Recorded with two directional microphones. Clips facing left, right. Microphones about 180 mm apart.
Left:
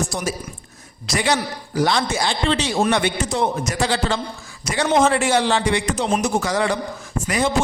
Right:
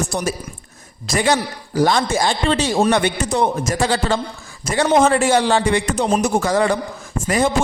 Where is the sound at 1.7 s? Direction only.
40° right (ahead or behind).